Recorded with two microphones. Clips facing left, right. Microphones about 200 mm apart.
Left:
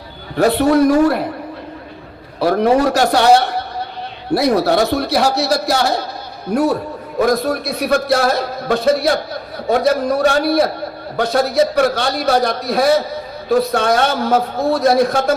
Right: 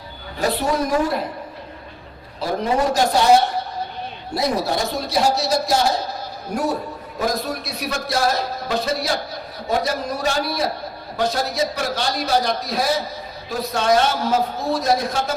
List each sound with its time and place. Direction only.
0.3 s a man's voice: 65° left (ahead or behind)
2.4 s a man's voice: 70° left (ahead or behind)
7.2 s a man's voice: 60° left (ahead or behind)